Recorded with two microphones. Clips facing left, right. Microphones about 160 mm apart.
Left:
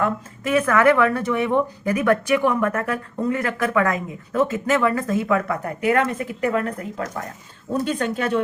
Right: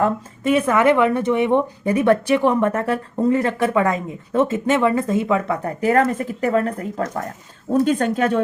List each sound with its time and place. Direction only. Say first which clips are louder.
0.0 s speech: right 4 dB; 25° right (ahead or behind); by 8.4 s 45° right (ahead or behind)